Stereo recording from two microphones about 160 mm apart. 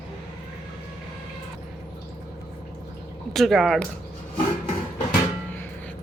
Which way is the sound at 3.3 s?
Centre (ahead or behind).